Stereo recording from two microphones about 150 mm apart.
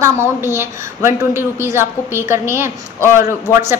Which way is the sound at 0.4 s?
15° right (ahead or behind).